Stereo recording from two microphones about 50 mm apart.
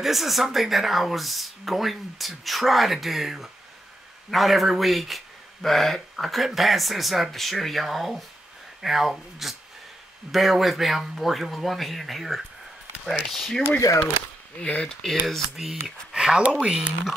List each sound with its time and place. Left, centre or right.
0.0 s speech: centre
13.5 s speech: centre
15.0 s speech: centre
15.5 s speech: centre